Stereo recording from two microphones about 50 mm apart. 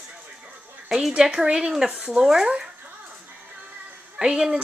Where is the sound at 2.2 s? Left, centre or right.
Centre.